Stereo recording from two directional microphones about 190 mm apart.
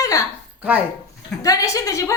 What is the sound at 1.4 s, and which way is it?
Speech, 15° left (ahead or behind).